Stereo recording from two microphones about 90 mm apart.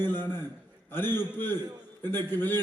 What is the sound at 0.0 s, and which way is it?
A man's voice, 25° left (ahead or behind).